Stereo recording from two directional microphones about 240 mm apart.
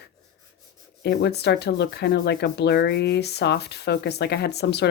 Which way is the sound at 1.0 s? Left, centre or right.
Left.